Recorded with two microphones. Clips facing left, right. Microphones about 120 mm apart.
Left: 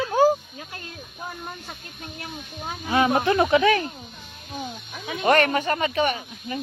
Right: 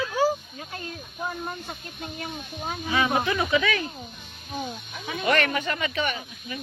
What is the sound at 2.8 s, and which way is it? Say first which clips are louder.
Speech: left 4 dB; 50° left (ahead or behind).